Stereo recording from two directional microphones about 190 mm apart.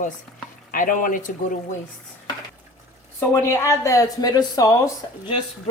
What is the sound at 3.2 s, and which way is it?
Speech, 10° left (ahead or behind).